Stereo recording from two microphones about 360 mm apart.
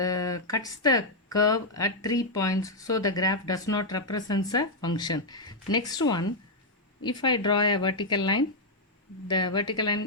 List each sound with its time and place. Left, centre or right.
0.0 s speech: centre